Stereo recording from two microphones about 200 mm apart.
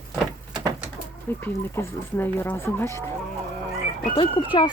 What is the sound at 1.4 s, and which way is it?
Speech, 10° left (ahead or behind).